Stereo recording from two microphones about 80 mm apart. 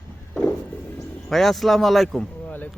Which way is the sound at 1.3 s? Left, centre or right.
Centre.